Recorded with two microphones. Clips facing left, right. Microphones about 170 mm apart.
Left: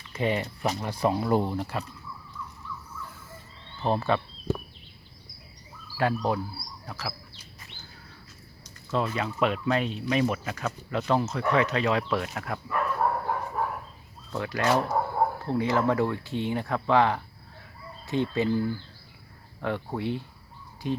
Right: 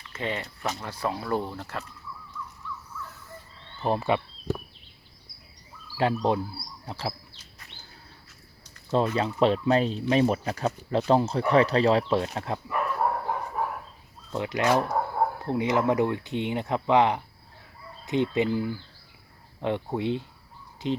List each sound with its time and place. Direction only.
0.1 s speech: 15° left (ahead or behind)
3.8 s speech: 10° right (ahead or behind)
6.0 s speech: 20° right (ahead or behind)
6.8 s a sound: 30° right (ahead or behind)
8.9 s speech: 30° right (ahead or behind)
12.6 s bow-wow: 10° right (ahead or behind)
14.3 s speech: 20° right (ahead or behind)